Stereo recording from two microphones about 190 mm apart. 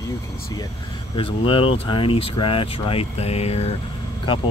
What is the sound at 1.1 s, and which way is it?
Speech, 30° left (ahead or behind).